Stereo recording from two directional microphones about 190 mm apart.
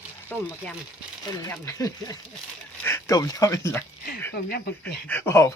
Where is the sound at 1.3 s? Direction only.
15° left (ahead or behind).